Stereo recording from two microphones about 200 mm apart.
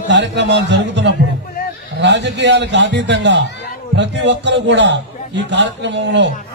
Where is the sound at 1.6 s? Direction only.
50° left (ahead or behind).